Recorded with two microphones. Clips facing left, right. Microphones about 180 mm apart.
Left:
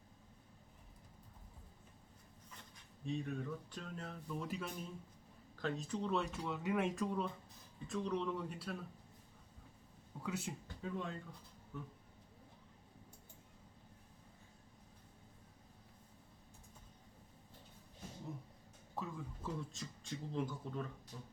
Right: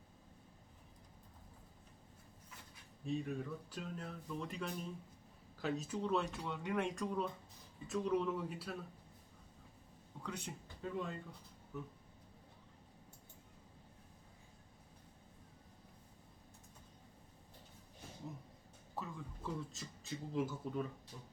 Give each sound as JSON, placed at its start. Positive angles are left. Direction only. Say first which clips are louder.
{"t": 3.0, "sound": "speech", "louder": "right 1 dB", "side_deg": 0}
{"t": 10.2, "sound": "speech", "louder": "left 3 dB", "side_deg": 5}
{"t": 18.9, "sound": "speech", "louder": "left 1 dB", "side_deg": 0}